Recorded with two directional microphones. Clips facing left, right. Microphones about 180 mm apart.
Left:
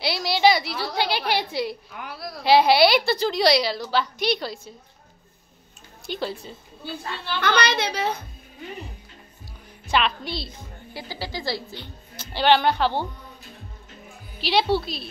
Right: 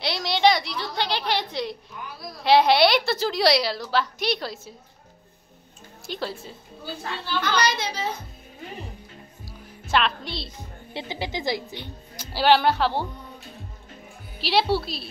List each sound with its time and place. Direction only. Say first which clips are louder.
0.0 s a woman's voice: left 1 dB; 5° left (ahead or behind)
2.0 s a woman's voice: left 4 dB; 70° left (ahead or behind)
2.4 s a woman's voice: left 1 dB; 5° left (ahead or behind)
6.0 s a woman's voice: left 2 dB; centre (ahead or behind)
7.2 s a woman's voice: left 1 dB; 65° left (ahead or behind)
9.8 s a woman's voice: even; centre (ahead or behind)
10.9 s a woman's voice: right 3 dB; 25° right (ahead or behind); by 13.0 s centre (ahead or behind)
14.4 s a woman's voice: left 1 dB; centre (ahead or behind)